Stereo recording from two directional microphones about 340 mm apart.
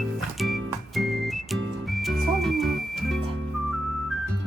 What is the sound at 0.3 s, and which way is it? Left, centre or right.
Music, centre.